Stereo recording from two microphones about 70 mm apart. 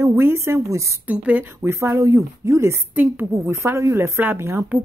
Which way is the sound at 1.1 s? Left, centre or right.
Right.